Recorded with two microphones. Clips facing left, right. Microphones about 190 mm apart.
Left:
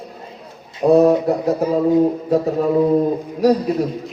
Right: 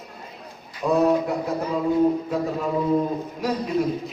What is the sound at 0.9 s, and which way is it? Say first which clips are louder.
Speech: left 7 dB; 40° left (ahead or behind).